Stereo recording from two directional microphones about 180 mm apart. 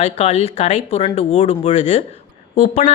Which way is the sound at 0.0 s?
35° left (ahead or behind).